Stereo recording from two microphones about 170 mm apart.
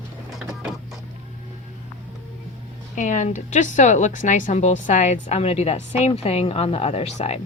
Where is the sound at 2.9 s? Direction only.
45° left (ahead or behind).